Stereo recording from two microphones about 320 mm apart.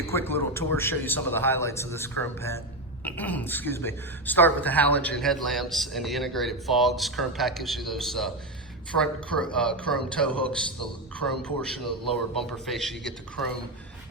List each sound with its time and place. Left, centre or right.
0.0 s a man's voice: centre